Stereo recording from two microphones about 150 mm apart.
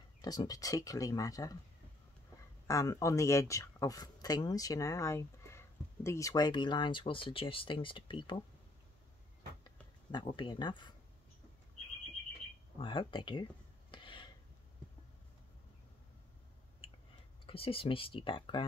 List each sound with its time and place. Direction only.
0.2 s speech: 25° left (ahead or behind)
2.6 s speech: 20° left (ahead or behind)
10.1 s speech: 35° left (ahead or behind)
12.7 s a sound: 35° left (ahead or behind)
17.5 s speech: 40° left (ahead or behind)